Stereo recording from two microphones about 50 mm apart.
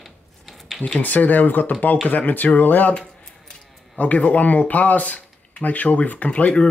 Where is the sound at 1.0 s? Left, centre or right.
Left.